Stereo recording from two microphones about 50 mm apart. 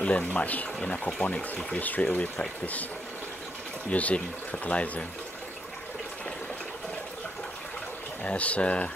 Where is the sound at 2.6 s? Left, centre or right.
Left.